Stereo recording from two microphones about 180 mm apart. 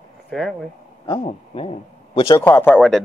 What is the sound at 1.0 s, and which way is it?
Speech, 30° left (ahead or behind).